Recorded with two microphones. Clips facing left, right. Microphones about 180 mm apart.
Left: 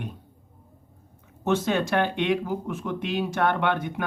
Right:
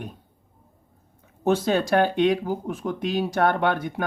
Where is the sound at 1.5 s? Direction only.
35° right (ahead or behind).